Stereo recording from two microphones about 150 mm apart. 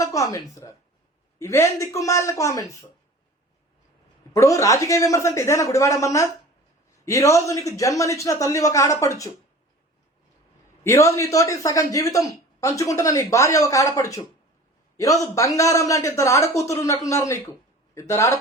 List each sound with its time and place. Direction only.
0.0 s a man's voice: 20° left (ahead or behind)
4.3 s a man's voice: 20° left (ahead or behind)
10.8 s a man's voice: 20° left (ahead or behind)